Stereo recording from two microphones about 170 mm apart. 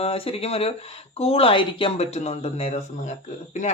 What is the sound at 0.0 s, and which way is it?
Speech, 35° left (ahead or behind).